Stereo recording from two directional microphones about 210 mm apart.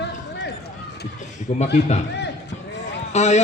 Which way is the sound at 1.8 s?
55° left (ahead or behind).